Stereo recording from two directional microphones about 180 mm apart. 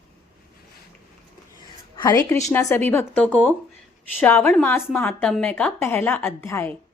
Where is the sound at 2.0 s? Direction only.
20° left (ahead or behind).